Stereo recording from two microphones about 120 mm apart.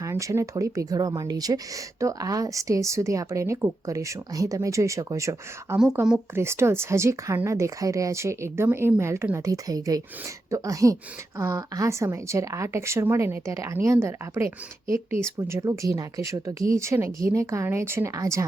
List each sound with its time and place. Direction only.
0.0 s speech: 25° right (ahead or behind)